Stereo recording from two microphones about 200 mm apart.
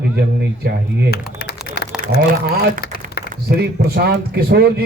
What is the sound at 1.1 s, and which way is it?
Typing, 50° left (ahead or behind).